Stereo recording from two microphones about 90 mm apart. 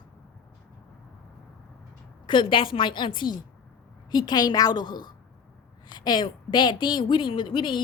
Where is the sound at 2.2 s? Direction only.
65° left (ahead or behind).